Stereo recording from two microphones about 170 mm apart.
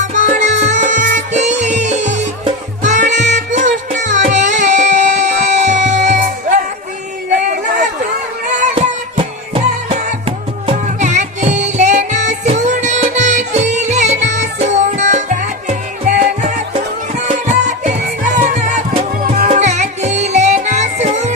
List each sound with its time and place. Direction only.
0.0 s music: 45° right (ahead or behind)
7.4 s a sound: 45° right (ahead or behind)
8.7 s music: 35° right (ahead or behind)